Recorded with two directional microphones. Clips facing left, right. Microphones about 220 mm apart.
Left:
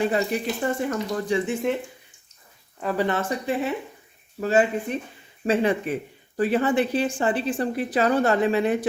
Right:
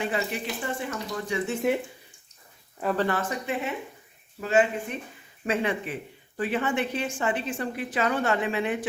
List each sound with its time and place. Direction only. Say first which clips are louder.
0.0 s a woman's voice: left 6 dB; 40° left (ahead or behind)
3.1 s a woman's voice: left 3 dB; 30° left (ahead or behind)